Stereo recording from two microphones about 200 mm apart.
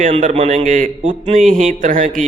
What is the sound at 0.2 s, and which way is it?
A man's voice, 40° right (ahead or behind).